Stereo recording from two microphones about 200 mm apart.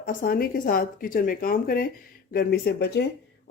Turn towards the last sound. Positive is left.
turn(degrees=55)  # may be behind; listen again after turning